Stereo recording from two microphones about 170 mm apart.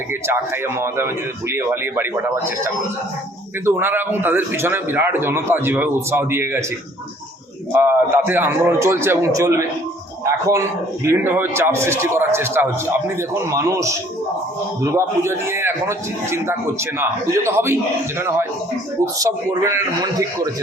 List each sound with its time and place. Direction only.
0.1 s a man's voice: 15° right (ahead or behind)
3.7 s a man's voice: 10° right (ahead or behind)
7.7 s a man's voice: 15° right (ahead or behind)
11.0 s a man's voice: 15° right (ahead or behind)